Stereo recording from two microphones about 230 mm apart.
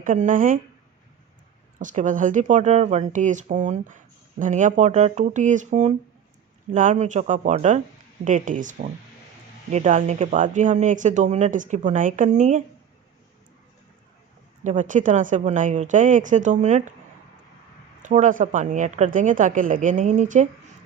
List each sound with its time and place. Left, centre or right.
0.0 s speech: right
1.8 s speech: right
14.6 s speech: right
18.0 s speech: right